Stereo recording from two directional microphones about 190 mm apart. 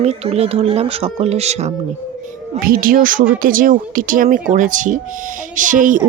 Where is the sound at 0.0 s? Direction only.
35° right (ahead or behind).